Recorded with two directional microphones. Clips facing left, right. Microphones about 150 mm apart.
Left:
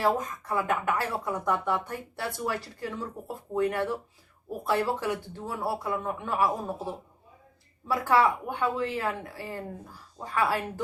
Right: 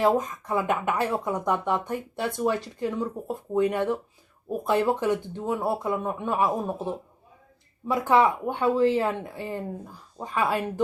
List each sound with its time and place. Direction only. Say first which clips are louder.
0.0 s speech: right 4 dB; 20° right (ahead or behind)